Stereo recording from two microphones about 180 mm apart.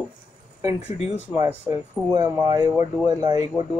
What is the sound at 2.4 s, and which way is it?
Speech, 20° right (ahead or behind).